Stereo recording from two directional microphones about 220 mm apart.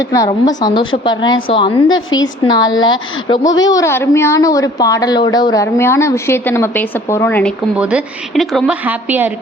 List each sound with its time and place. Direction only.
0.1 s a woman's voice: 15° left (ahead or behind)
7.8 s a woman's voice: 5° right (ahead or behind)